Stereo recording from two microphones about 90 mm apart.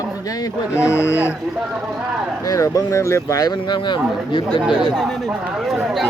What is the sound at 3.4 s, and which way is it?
Speech, 50° left (ahead or behind).